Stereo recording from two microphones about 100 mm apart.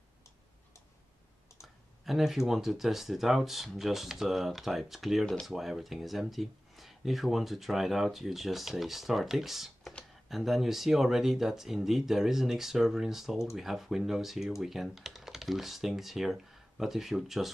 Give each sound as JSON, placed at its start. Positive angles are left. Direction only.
{"t": 1.6, "sound": "speech", "side_deg": -5}